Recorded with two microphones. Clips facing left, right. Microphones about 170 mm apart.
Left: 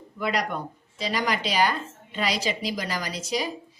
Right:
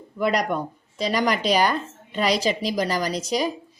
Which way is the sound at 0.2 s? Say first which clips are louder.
Right 5 dB; 45° right (ahead or behind).